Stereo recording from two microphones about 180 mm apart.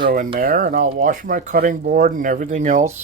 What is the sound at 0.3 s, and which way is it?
Speech, 50° right (ahead or behind).